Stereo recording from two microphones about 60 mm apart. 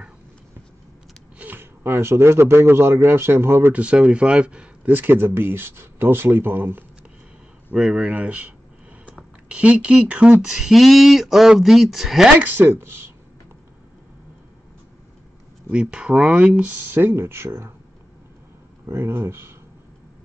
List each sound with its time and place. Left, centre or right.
1.4 s speech: right
3.7 s speech: right
4.9 s speech: right
7.9 s speech: right
10.5 s speech: centre
12.4 s speech: right
12.7 s speech: right
15.7 s speech: centre
16.9 s speech: right
18.9 s speech: right